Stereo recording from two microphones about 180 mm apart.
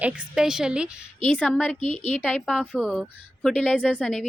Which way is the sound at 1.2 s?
5° left (ahead or behind).